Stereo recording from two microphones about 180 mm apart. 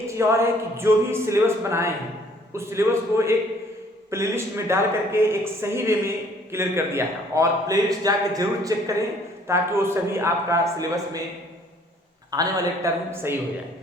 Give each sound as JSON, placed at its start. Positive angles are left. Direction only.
{"t": 0.1, "sound": "speech", "side_deg": -15}
{"t": 12.3, "sound": "speech", "side_deg": -20}